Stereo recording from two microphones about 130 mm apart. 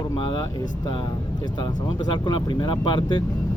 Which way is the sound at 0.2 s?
40° left (ahead or behind).